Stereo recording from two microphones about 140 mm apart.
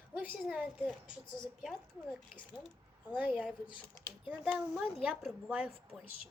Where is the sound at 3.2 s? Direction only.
10° right (ahead or behind).